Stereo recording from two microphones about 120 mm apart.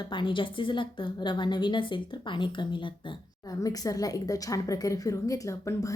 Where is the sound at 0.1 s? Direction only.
40° left (ahead or behind).